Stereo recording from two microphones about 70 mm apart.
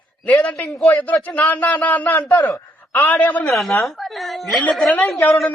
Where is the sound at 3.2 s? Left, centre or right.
Left.